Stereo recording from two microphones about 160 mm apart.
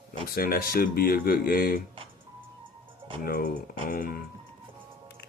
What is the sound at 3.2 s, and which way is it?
Speech, 65° left (ahead or behind).